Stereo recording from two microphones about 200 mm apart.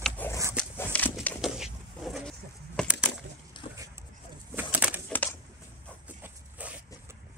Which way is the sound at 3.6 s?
25° left (ahead or behind).